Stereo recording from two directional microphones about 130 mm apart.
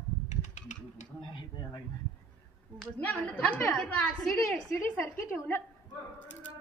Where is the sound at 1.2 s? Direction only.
35° left (ahead or behind).